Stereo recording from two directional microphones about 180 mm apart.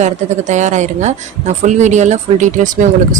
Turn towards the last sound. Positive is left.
turn(degrees=-45)  # may be behind; listen again after turning